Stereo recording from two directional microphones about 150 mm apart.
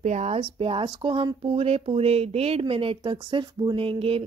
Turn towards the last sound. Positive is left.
turn(degrees=-40)  # may be behind; listen again after turning